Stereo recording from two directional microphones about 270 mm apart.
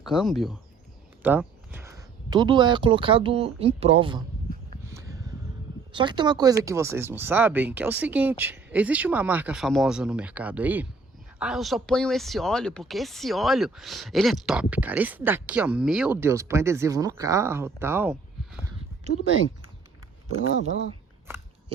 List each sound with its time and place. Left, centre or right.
0.0 s speech: centre; by 4.2 s right
4.9 s a sound: centre
5.9 s speech: centre
21.3 s biting: centre